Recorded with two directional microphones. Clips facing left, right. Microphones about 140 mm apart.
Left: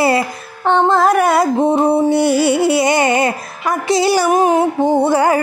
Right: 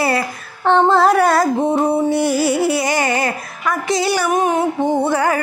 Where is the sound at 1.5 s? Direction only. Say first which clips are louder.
Left 3 dB; 25° left (ahead or behind).